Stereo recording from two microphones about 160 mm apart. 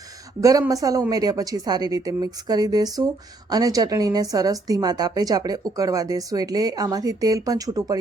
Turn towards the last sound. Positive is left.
turn(degrees=-20)  # may be behind; listen again after turning